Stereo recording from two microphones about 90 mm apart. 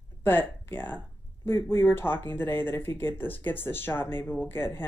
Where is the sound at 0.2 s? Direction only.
25° left (ahead or behind).